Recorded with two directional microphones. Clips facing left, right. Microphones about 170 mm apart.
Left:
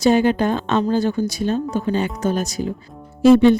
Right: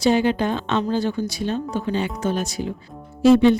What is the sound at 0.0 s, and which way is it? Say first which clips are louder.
Speech: left 3 dB; 45° left (ahead or behind).